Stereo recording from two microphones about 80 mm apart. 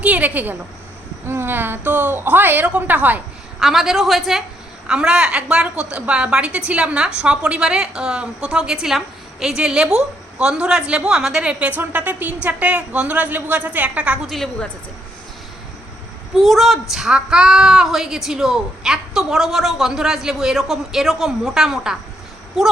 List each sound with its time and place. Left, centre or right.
0.0 s a woman's voice: centre
3.6 s a woman's voice: centre
11.8 s a woman's voice: right
14.3 s a woman's voice: centre
16.3 s a woman's voice: centre